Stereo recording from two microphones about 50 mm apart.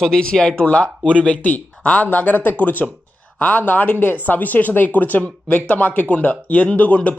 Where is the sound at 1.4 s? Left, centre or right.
Left.